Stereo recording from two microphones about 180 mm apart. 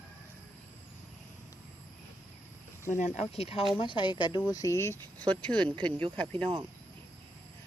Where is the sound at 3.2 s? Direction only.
35° left (ahead or behind); by 5.9 s 5° left (ahead or behind).